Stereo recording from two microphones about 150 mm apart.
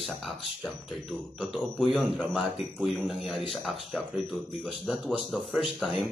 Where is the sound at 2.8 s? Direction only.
Centre (ahead or behind).